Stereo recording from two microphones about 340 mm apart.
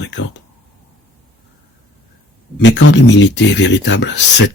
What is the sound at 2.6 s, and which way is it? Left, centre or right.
Speech, left.